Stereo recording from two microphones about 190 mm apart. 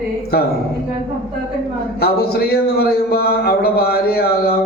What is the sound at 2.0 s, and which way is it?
A man's voice, 55° left (ahead or behind).